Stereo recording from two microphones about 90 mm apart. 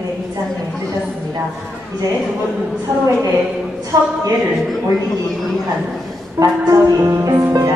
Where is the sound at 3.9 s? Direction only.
40° right (ahead or behind).